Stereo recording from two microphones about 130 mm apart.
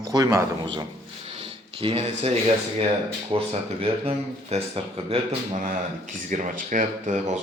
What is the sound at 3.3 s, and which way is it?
Speech, 50° right (ahead or behind).